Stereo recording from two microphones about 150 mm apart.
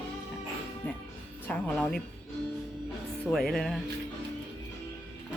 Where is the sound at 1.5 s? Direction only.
5° left (ahead or behind).